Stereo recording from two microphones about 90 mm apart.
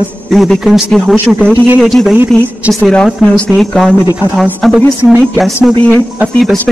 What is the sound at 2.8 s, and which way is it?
Speech, 10° left (ahead or behind).